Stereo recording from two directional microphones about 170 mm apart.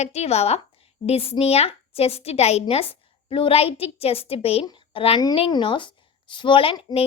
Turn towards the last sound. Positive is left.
turn(degrees=35)  # may be behind; listen again after turning